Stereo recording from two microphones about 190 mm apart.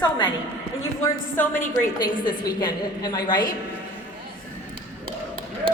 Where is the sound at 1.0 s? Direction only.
10° left (ahead or behind).